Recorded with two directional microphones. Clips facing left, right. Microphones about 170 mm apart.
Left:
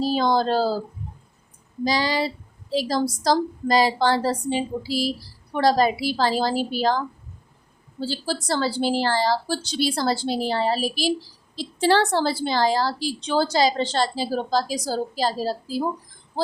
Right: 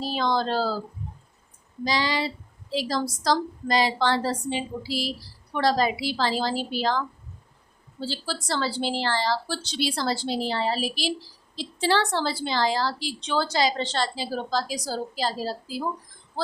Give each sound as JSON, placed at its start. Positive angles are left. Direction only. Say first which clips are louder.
{"t": 0.0, "sound": "a woman's voice", "louder": "left 5 dB", "side_deg": 35}
{"t": 1.8, "sound": "a woman's voice", "louder": "left 3 dB", "side_deg": 40}
{"t": 8.0, "sound": "a woman's voice", "louder": "left 4 dB", "side_deg": 45}